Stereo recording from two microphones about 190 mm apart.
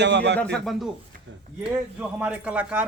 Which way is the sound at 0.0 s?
65° right (ahead or behind).